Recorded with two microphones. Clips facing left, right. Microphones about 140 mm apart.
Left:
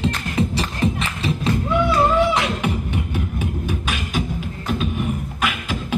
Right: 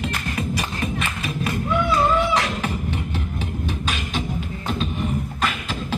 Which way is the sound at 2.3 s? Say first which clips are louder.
Left 2 dB; 20° left (ahead or behind).